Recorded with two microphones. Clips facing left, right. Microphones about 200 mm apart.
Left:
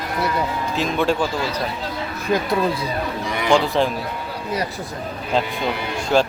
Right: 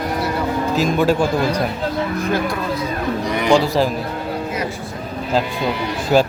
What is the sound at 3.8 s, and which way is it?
Speech, 5° right (ahead or behind).